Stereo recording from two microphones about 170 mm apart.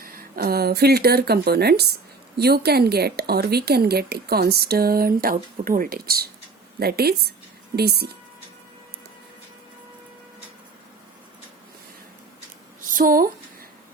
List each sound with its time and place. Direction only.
0.0 s a woman's voice: 60° right (ahead or behind)
12.9 s speech: 55° right (ahead or behind)